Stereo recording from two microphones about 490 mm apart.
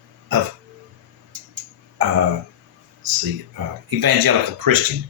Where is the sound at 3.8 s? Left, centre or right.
Right.